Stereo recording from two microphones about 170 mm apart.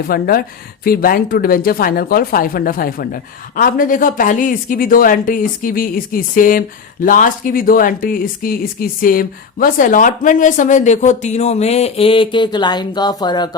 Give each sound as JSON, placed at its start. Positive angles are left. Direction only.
{"t": 0.1, "sound": "speech", "side_deg": 60}